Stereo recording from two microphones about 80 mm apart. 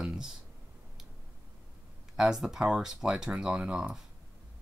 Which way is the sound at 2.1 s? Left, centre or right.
Centre.